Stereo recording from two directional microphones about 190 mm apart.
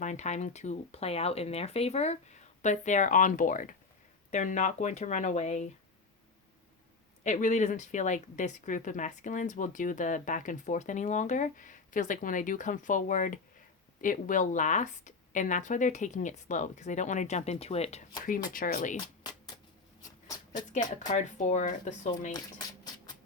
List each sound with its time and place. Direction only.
0.0 s speech: 40° left (ahead or behind)
7.3 s speech: 40° left (ahead or behind)
18.4 s speech: 45° left (ahead or behind)
19.2 s a sound: 20° left (ahead or behind)
21.1 s speech: 40° left (ahead or behind)